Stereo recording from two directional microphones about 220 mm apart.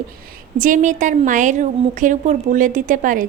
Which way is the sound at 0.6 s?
35° right (ahead or behind).